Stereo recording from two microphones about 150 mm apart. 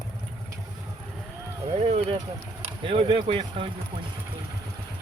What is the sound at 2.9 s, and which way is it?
Speech, 35° right (ahead or behind).